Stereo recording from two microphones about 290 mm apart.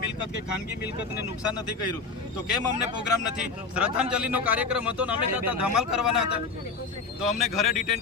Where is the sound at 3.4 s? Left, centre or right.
Centre.